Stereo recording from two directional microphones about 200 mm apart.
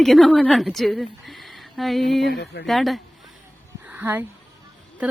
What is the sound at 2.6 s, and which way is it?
Speech, centre (ahead or behind).